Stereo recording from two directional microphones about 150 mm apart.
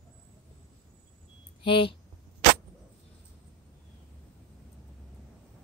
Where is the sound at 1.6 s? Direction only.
35° left (ahead or behind).